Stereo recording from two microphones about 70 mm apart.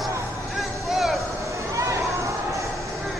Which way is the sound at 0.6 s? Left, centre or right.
Centre.